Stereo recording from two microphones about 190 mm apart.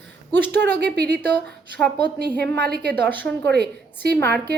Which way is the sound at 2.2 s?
60° right (ahead or behind).